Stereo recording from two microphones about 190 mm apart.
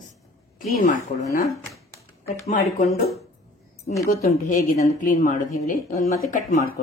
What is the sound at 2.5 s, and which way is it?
Speech, 40° left (ahead or behind).